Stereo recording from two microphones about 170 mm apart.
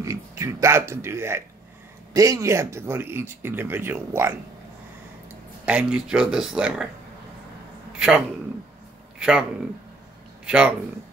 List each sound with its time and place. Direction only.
0.0 s speech: 20° right (ahead or behind)
5.7 s speech: 5° right (ahead or behind)
9.2 s speech: 5° right (ahead or behind)